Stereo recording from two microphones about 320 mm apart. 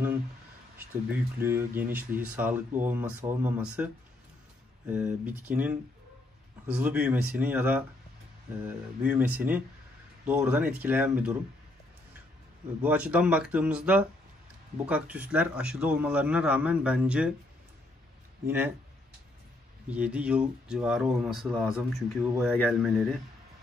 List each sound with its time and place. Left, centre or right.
1.1 s a man's voice: centre
6.8 s a man's voice: centre
12.8 s a man's voice: centre
19.9 s a man's voice: centre